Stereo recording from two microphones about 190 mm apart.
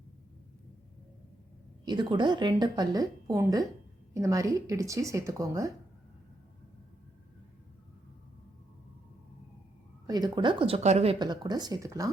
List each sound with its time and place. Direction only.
1.8 s speech: 25° right (ahead or behind)
10.1 s speech: 20° right (ahead or behind)